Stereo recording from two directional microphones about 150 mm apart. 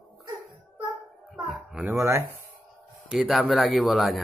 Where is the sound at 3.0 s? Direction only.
Centre (ahead or behind).